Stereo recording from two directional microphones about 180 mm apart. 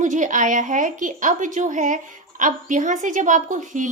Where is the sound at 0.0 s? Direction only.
45° right (ahead or behind).